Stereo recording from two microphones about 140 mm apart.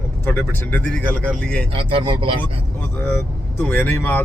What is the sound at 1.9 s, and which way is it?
Speech, 40° right (ahead or behind).